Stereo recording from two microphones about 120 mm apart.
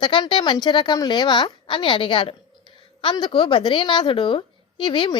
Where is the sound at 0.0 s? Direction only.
40° left (ahead or behind).